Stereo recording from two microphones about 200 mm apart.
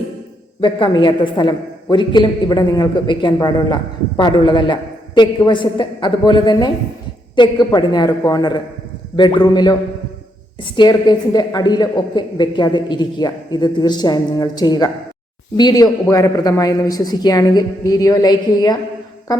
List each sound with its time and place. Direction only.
0.6 s a woman's voice: 25° left (ahead or behind)